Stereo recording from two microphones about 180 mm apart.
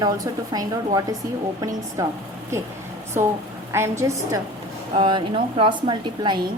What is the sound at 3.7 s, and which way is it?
Speech, 15° right (ahead or behind).